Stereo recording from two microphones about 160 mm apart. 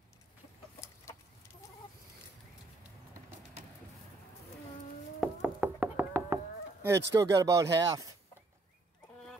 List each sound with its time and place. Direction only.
5.2 s knock: 5° right (ahead or behind)
7.1 s speech: 20° right (ahead or behind)